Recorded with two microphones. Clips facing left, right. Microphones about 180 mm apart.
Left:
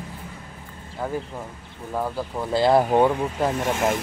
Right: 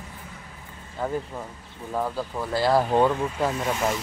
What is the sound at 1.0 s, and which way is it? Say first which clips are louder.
Speech: even; 5° left (ahead or behind).